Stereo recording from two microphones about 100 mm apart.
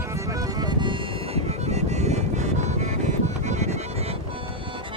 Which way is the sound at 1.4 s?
90° right.